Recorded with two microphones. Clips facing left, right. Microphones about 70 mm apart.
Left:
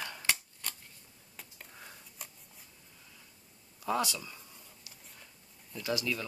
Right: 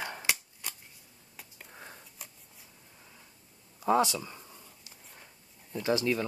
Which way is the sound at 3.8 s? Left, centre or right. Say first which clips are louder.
Right 6 dB; right.